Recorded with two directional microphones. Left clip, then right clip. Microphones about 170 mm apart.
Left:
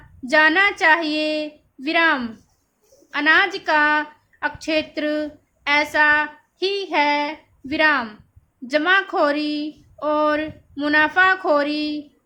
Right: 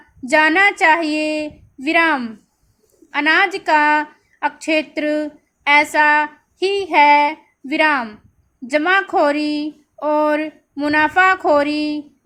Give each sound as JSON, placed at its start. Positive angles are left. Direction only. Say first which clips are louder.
{"t": 0.3, "sound": "a woman's voice", "louder": "right 2 dB", "side_deg": -15}